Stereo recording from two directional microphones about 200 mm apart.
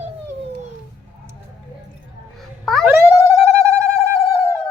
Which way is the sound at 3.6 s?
15° right (ahead or behind).